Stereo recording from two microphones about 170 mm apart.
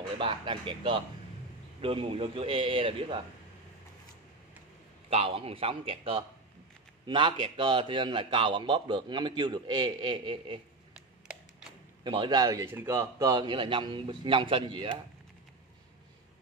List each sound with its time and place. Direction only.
0.2 s a man's voice: 30° right (ahead or behind)
5.1 s a man's voice: 35° right (ahead or behind)
12.0 s a man's voice: 25° right (ahead or behind)